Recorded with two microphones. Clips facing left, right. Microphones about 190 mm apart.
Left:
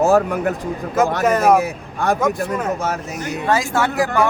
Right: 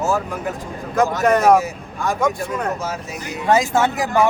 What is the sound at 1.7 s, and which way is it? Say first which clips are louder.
Speech: left 4 dB; 60° left (ahead or behind).